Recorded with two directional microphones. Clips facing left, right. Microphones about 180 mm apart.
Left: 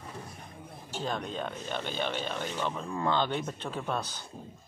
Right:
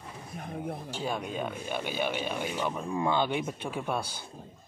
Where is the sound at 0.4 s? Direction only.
60° right (ahead or behind).